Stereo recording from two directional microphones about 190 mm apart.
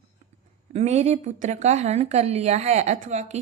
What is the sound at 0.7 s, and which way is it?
A woman's voice, 35° right (ahead or behind).